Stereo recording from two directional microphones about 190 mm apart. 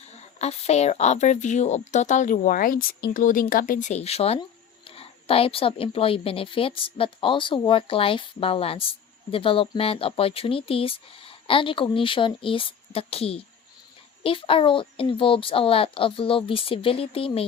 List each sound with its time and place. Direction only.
0.3 s speech: 35° left (ahead or behind)